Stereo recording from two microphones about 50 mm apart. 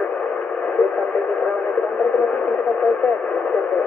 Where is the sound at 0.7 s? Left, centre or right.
Left.